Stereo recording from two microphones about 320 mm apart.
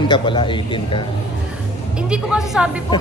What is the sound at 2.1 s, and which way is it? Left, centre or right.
Speech, centre.